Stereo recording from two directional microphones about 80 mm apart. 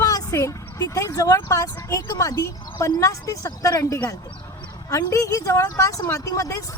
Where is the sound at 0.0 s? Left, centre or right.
Left.